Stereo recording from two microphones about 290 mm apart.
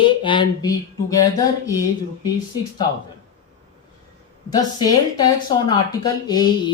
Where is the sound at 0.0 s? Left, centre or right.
Centre.